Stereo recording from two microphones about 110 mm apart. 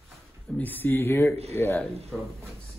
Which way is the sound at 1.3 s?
70° right (ahead or behind).